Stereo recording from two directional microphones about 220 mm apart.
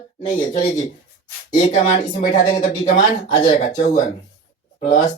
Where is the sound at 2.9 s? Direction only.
45° left (ahead or behind).